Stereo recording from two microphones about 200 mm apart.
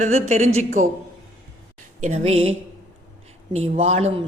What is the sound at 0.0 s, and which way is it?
Speech, 35° right (ahead or behind).